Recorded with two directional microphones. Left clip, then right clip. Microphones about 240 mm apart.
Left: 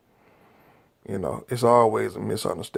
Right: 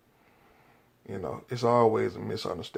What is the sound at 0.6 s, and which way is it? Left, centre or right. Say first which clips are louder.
Speech: left 7 dB; left.